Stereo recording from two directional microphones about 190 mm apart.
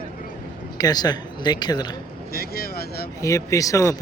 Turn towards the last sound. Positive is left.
turn(degrees=15)  # may be behind; listen again after turning